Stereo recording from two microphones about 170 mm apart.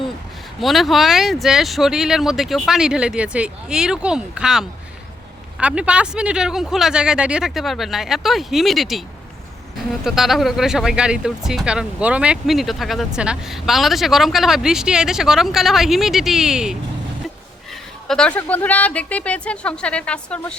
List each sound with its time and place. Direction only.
0.6 s speech: centre (ahead or behind)
18.1 s speech: 5° left (ahead or behind)